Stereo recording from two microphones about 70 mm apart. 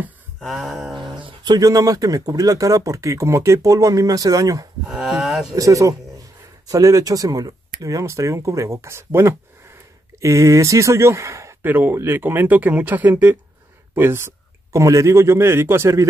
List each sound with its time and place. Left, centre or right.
0.4 s a sound: centre
1.0 s speech: right
4.8 s speech: centre
5.6 s speech: right
10.2 s speech: right
11.6 s speech: right